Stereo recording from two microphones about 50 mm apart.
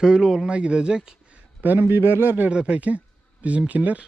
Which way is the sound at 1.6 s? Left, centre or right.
Right.